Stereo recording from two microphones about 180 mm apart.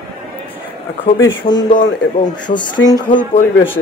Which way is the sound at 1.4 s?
25° left (ahead or behind).